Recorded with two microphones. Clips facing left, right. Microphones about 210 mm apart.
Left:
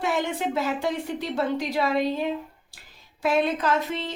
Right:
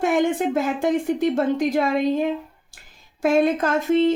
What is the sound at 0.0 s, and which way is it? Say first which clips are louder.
A woman's voice: right 6 dB; 50° right (ahead or behind).